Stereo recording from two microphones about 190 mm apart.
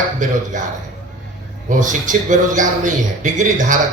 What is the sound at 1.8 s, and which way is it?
A man's voice, 40° right (ahead or behind).